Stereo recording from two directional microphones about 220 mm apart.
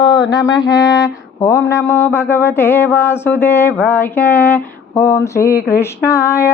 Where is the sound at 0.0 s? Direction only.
20° left (ahead or behind).